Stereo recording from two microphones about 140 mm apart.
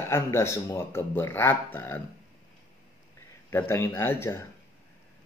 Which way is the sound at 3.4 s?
15° left (ahead or behind).